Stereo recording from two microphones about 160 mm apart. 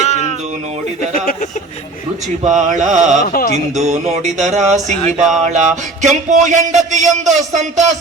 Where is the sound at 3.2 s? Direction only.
65° left (ahead or behind).